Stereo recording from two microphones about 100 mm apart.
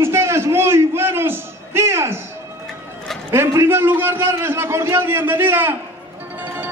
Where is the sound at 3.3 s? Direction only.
25° right (ahead or behind).